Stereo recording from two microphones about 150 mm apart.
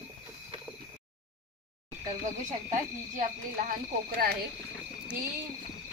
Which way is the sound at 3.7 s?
75° right (ahead or behind).